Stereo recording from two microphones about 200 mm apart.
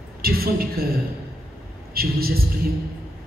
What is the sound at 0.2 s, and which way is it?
Speech, 50° right (ahead or behind).